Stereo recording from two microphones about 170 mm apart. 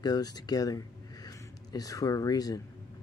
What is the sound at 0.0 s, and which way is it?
Speech, 20° left (ahead or behind).